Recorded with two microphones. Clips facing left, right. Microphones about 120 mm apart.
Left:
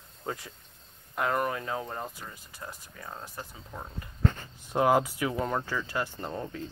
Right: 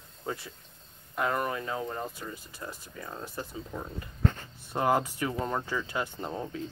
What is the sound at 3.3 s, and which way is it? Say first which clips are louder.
Speech: right 4 dB; 15° left (ahead or behind).